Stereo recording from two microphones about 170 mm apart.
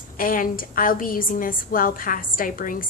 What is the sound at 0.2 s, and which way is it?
A woman's voice, 55° left (ahead or behind).